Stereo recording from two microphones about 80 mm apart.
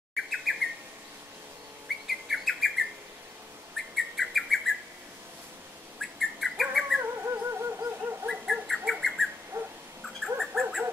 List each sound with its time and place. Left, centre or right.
0.1 s bird: centre
2.2 s bird: centre
3.7 s bird: centre
5.9 s bird: centre
7.0 s a sound: right
8.6 s owl: centre
9.0 s bird: centre
9.5 s a sound: right
10.0 s dog: centre